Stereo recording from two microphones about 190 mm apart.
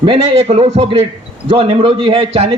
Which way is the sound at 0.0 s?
30° right (ahead or behind).